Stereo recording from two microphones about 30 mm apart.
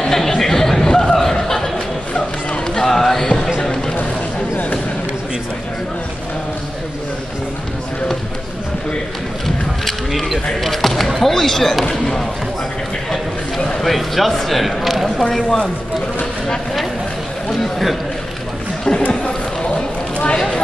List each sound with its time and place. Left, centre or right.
0.0 s chatter: centre
0.4 s a sound: centre
2.9 s a sound: centre
10.6 s basketball bounce: centre
11.2 s speech: centre
13.7 s speech: centre
15.1 s speech: centre
17.5 s a sound: centre
18.9 s chatter: left